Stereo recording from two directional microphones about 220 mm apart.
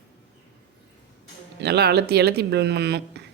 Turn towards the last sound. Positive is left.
turn(degrees=-50)  # may be behind; listen again after turning